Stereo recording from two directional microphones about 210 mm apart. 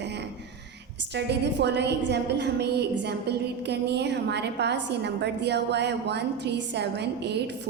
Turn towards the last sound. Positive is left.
turn(degrees=-55)  # may be behind; listen again after turning